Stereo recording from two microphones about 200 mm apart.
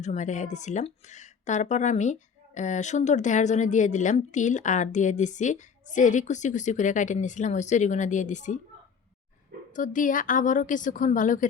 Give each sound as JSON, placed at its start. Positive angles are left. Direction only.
{"t": 0.0, "sound": "a woman's voice", "side_deg": 35}
{"t": 9.7, "sound": "a woman's voice", "side_deg": 40}